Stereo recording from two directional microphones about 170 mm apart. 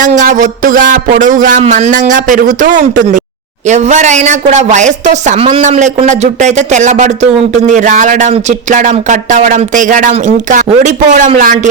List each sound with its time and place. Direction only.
0.0 s speech: 50° right (ahead or behind)